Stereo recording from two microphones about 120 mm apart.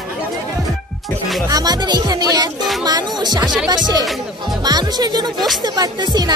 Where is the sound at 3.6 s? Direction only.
35° right (ahead or behind).